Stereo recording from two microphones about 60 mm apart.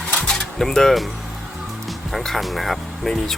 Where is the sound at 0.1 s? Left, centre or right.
Centre.